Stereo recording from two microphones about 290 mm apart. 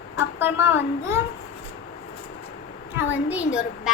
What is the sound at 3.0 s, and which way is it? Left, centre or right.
Speech, centre.